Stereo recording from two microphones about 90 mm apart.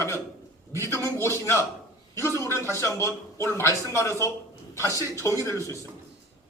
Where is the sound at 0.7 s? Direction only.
35° left (ahead or behind).